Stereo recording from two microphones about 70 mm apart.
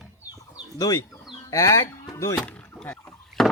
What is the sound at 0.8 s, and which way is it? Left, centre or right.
Speech, left.